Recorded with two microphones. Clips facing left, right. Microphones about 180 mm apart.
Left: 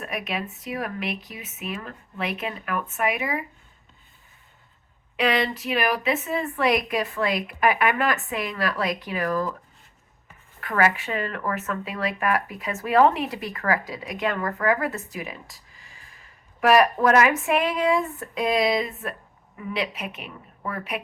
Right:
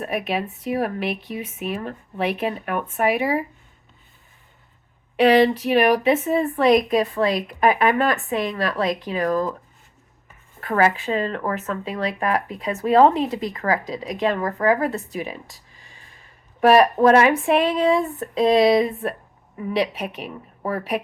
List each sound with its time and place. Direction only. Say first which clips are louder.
0.0 s a woman's voice: right 6 dB; 35° right (ahead or behind)
5.2 s a woman's voice: right 8 dB; 35° right (ahead or behind)
10.6 s speech: right 3 dB; 30° right (ahead or behind)
16.6 s a woman's voice: right 4 dB; 30° right (ahead or behind)